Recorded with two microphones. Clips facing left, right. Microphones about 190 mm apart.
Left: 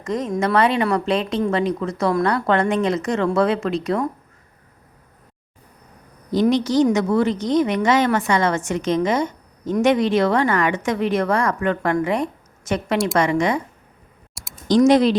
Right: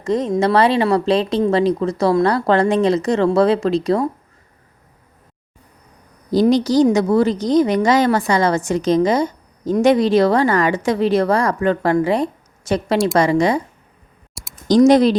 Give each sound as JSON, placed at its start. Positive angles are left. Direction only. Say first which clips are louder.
{"t": 0.0, "sound": "a woman's voice", "louder": "right 5 dB", "side_deg": -30}
{"t": 6.3, "sound": "a woman's voice", "louder": "right 3 dB", "side_deg": -35}
{"t": 14.7, "sound": "a woman's voice", "louder": "right 3 dB", "side_deg": -40}